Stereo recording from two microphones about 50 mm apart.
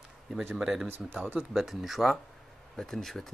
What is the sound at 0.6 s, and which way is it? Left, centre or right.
Speech, centre.